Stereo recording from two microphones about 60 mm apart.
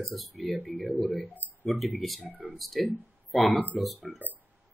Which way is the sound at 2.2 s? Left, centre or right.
Right.